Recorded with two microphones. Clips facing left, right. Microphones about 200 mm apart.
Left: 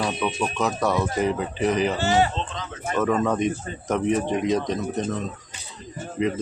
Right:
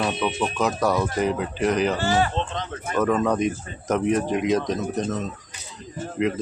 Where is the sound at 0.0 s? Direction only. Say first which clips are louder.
Right 1 dB; centre (ahead or behind).